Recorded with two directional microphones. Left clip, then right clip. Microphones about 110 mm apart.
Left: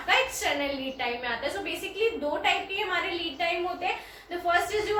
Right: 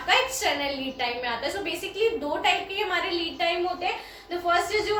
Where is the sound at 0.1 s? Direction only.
25° right (ahead or behind).